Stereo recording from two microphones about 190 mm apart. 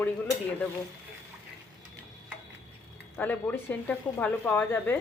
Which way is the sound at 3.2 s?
10° left (ahead or behind).